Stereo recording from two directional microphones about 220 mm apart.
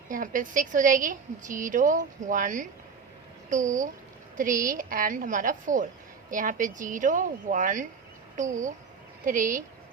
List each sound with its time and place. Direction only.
0.1 s a woman's voice: 35° right (ahead or behind)